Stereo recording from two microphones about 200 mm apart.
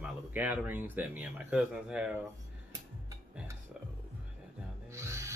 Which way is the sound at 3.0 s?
15° right (ahead or behind).